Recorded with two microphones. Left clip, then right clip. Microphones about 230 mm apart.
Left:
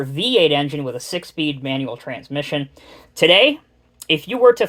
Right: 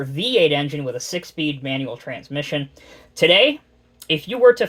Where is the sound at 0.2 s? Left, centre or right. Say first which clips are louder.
Left 2 dB; left.